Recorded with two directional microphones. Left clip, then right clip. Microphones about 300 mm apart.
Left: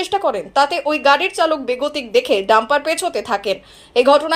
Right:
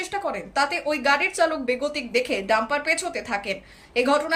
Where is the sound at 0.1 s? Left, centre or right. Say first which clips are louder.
Left 9 dB; left.